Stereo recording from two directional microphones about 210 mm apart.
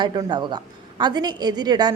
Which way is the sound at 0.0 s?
20° right (ahead or behind).